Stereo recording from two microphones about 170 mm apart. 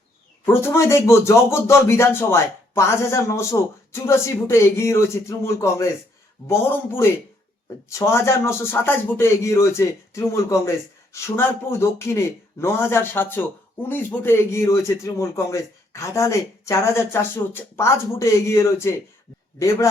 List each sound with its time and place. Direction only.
0.4 s a man's voice: 15° left (ahead or behind)